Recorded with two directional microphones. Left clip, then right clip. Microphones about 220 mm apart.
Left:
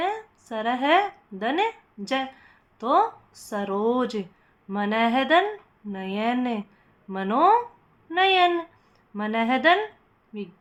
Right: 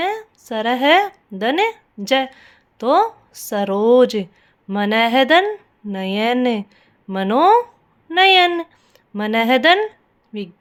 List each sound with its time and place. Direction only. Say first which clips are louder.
0.0 s a woman's voice: right 5 dB; 40° right (ahead or behind)